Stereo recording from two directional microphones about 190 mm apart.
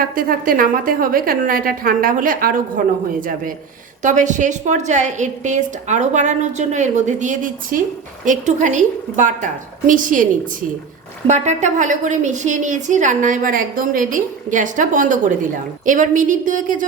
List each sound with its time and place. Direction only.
0.0 s a woman's voice: 50° right (ahead or behind)
11.3 s a woman's voice: 40° right (ahead or behind)